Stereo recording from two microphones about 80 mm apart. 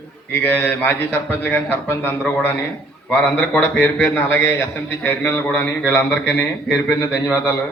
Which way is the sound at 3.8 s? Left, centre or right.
Centre.